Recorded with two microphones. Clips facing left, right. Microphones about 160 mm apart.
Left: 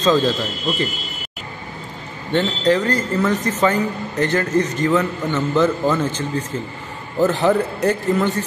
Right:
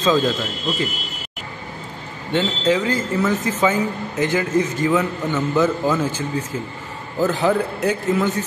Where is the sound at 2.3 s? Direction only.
5° right (ahead or behind).